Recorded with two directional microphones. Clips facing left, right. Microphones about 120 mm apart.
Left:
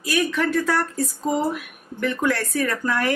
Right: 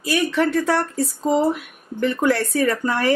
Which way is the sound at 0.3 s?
30° right (ahead or behind).